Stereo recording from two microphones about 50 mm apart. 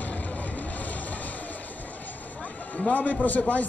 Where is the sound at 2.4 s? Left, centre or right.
Left.